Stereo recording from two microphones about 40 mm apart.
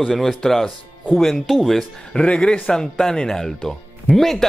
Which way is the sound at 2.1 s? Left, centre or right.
Left.